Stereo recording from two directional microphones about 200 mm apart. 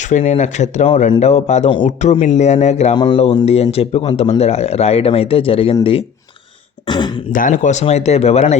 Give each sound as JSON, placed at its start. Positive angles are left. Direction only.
{"t": 0.1, "sound": "speech", "side_deg": 35}
{"t": 2.9, "sound": "speech", "side_deg": 20}
{"t": 7.3, "sound": "speech", "side_deg": 40}